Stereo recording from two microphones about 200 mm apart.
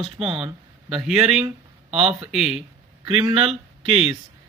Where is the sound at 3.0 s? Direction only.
30° right (ahead or behind).